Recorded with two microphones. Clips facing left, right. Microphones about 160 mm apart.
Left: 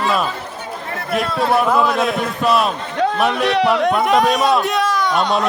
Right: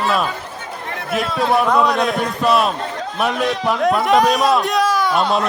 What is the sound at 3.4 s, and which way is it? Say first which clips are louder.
Speech: left 4 dB; 70° left (ahead or behind).